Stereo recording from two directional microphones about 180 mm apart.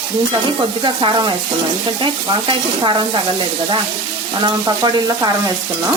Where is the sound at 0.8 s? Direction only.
25° right (ahead or behind).